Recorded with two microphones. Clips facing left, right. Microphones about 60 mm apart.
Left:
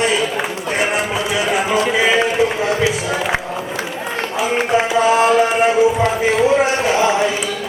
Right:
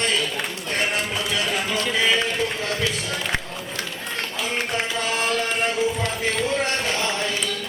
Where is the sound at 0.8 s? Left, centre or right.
Centre.